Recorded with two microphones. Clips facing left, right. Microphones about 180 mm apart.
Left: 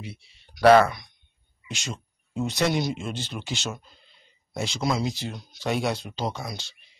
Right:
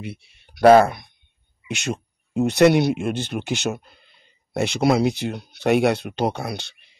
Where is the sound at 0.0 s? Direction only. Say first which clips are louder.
Right 6 dB; 60° right (ahead or behind).